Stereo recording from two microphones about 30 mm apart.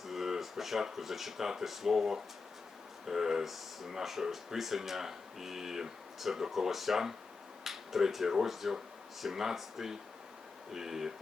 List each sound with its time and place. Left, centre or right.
0.0 s speech: centre